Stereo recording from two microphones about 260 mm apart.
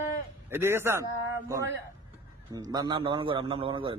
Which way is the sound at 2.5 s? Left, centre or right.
Centre.